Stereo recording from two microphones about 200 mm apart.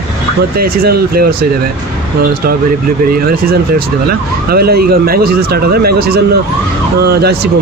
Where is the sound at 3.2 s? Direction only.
50° right (ahead or behind).